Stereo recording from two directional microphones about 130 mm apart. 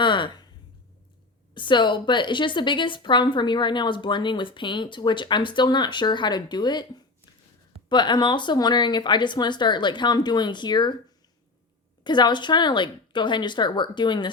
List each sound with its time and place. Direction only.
0.0 s a sound: 40° left (ahead or behind)
1.5 s a woman's voice: 35° left (ahead or behind)
12.0 s a woman's voice: 35° left (ahead or behind)